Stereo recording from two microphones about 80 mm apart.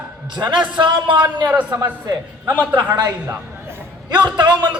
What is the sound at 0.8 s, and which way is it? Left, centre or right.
Speech, right.